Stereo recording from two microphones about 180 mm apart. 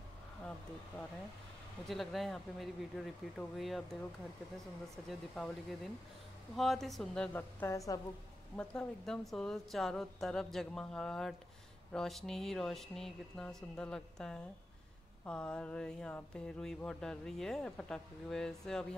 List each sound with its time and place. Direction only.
1.9 s speech: centre (ahead or behind)
5.3 s speech: centre (ahead or behind)
7.6 s a woman's voice: 20° left (ahead or behind)
8.5 s speech: 5° left (ahead or behind)